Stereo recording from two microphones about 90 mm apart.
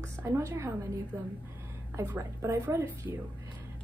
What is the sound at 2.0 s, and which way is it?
A woman's voice, 30° right (ahead or behind).